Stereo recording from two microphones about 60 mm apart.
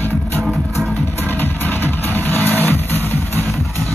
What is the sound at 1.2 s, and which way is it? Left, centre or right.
Music, left.